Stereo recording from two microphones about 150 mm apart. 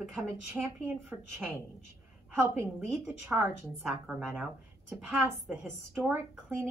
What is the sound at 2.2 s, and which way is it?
A woman's voice, 15° right (ahead or behind).